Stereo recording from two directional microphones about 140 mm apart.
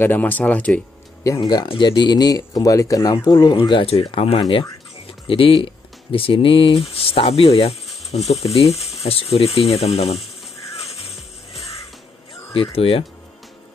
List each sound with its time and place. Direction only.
0.0 s speech: 15° left (ahead or behind)
1.4 s speech: 30° left (ahead or behind)
3.3 s speech: 35° left (ahead or behind)
12.7 s speech: 45° left (ahead or behind)